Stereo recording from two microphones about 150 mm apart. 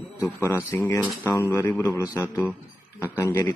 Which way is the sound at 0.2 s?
20° left (ahead or behind).